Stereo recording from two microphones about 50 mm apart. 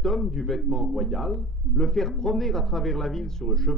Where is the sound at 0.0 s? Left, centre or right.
Centre.